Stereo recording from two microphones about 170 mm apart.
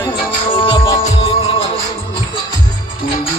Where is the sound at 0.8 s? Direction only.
20° left (ahead or behind).